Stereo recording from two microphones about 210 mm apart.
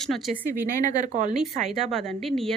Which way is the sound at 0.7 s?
40° right (ahead or behind).